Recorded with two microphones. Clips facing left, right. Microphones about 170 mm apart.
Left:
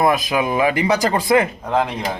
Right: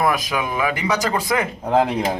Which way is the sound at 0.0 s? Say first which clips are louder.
Left 3 dB; 25° left (ahead or behind).